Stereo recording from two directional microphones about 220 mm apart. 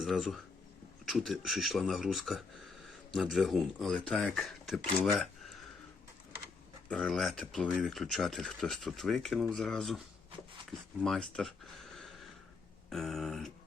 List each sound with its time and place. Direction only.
0.0 s speech: centre (ahead or behind)
6.8 s speech: centre (ahead or behind)
11.0 s speech: centre (ahead or behind)